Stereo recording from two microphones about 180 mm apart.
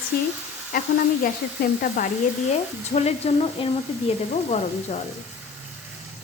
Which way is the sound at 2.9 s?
35° left (ahead or behind).